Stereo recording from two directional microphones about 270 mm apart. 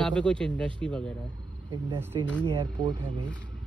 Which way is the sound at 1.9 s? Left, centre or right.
Centre.